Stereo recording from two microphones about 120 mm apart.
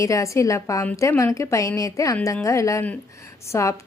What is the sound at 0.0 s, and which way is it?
A woman's voice, 25° left (ahead or behind).